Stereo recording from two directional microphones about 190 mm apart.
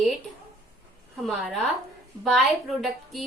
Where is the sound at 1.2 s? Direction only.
Centre (ahead or behind).